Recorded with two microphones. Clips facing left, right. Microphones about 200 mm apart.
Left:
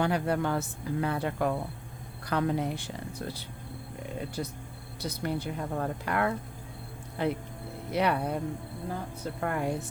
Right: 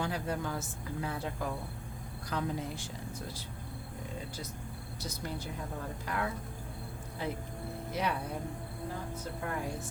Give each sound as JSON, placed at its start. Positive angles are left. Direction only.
{"t": 0.0, "sound": "a woman's voice", "side_deg": 65}
{"t": 9.4, "sound": "speech", "side_deg": 65}